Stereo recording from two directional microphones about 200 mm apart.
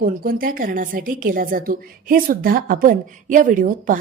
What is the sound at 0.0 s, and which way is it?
A woman's voice, 45° right (ahead or behind).